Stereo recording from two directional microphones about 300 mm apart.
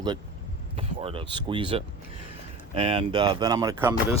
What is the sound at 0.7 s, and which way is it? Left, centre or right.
Speech, centre.